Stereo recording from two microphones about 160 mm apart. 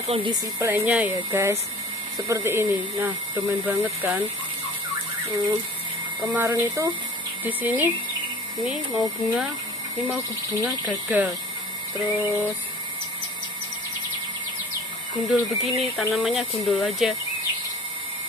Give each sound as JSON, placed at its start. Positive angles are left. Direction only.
{"t": 0.0, "sound": "speech", "side_deg": -40}
{"t": 0.3, "sound": "speech", "side_deg": -15}
{"t": 6.3, "sound": "speech", "side_deg": -15}
{"t": 10.6, "sound": "speech", "side_deg": -10}
{"t": 15.2, "sound": "speech", "side_deg": 0}